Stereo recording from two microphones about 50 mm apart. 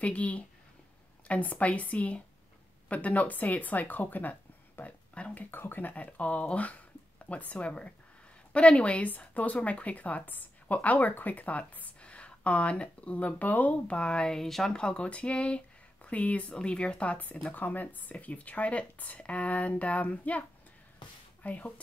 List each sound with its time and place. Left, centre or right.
0.0 s a woman's voice: left; by 14.8 s centre
14.8 s a woman's voice: left